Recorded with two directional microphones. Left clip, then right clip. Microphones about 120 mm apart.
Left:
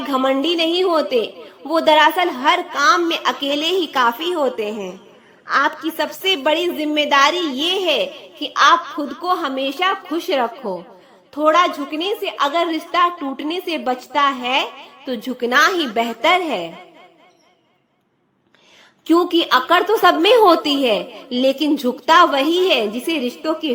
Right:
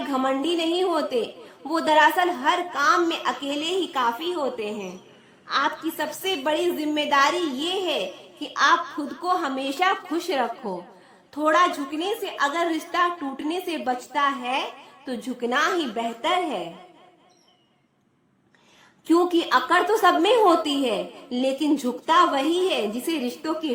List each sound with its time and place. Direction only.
0.3 s a woman's voice: 20° left (ahead or behind); by 10.2 s centre (ahead or behind)
10.2 s a woman's voice: 15° left (ahead or behind); by 14.8 s 30° left (ahead or behind)
15.0 s a woman's voice: 15° left (ahead or behind)
19.0 s a woman's voice: 15° left (ahead or behind)